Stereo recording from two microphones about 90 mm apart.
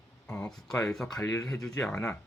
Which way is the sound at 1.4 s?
5° left (ahead or behind).